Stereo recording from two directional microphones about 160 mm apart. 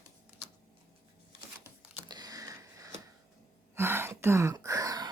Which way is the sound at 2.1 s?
25° right (ahead or behind).